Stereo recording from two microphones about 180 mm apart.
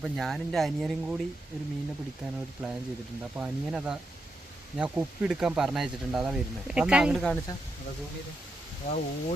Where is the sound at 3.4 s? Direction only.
5° right (ahead or behind).